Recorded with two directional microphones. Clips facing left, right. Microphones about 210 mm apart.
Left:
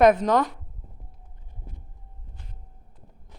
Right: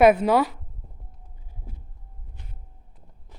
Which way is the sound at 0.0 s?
5° right (ahead or behind).